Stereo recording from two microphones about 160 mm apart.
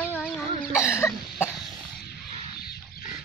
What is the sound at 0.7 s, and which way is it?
Cough, 20° left (ahead or behind).